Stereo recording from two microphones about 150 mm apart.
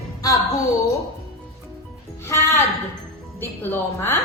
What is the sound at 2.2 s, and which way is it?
A woman's voice, 15° left (ahead or behind).